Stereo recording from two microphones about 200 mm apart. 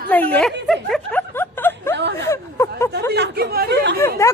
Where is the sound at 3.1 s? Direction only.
50° right (ahead or behind).